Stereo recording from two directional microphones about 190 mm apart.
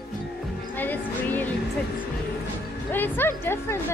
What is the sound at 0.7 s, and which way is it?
Speech, 10° left (ahead or behind).